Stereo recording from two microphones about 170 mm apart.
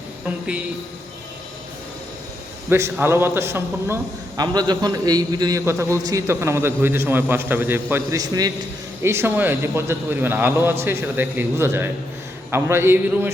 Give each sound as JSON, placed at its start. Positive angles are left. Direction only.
{"t": 2.6, "sound": "a man's voice", "side_deg": -15}